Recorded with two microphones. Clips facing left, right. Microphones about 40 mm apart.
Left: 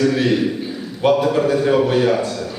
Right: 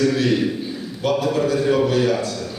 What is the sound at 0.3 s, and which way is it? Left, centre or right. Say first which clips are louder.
A man's voice: left 2 dB; centre.